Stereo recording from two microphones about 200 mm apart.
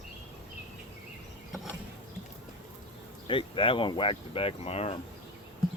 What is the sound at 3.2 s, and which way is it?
Speech, 25° left (ahead or behind).